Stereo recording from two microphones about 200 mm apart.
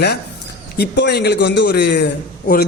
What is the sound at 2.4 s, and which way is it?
Speech, 45° left (ahead or behind).